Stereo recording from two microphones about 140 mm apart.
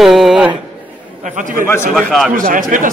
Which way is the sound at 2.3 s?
75° right (ahead or behind).